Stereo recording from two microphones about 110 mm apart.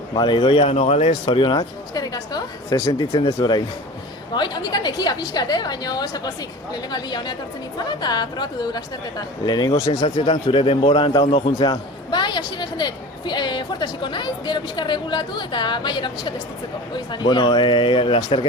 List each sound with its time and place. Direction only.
0.1 s speech: 45° left (ahead or behind); by 1.1 s 70° left (ahead or behind)
1.2 s a woman's voice: 50° left (ahead or behind)
1.5 s speech: 35° left (ahead or behind)
4.4 s a woman's voice: 40° left (ahead or behind)
10.2 s a woman's voice: 50° left (ahead or behind)
11.3 s speech: 65° left (ahead or behind)
11.6 s a woman's voice: 40° left (ahead or behind)